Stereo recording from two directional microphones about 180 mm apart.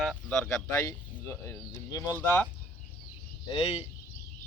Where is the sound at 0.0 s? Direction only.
Centre (ahead or behind).